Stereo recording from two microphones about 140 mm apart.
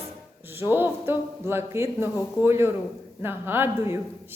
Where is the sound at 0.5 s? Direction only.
15° right (ahead or behind).